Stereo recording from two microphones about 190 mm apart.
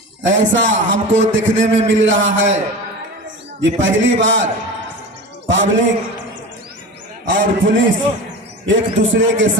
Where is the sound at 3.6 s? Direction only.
80° right.